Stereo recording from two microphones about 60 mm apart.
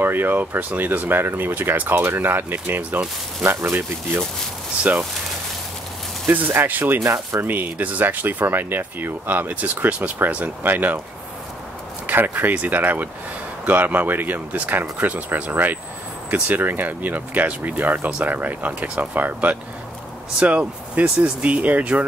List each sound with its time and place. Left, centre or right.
0.0 s speech: right
6.2 s speech: right
7.0 s speech: right
7.4 s speech: right
12.1 s speech: right